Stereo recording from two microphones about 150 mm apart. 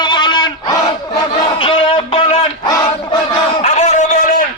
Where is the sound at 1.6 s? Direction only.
35° left (ahead or behind).